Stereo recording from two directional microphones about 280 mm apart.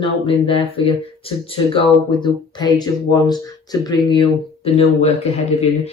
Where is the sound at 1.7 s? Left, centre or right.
Centre.